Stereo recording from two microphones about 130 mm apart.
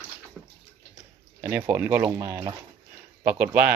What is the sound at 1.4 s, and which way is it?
Speech, 20° right (ahead or behind).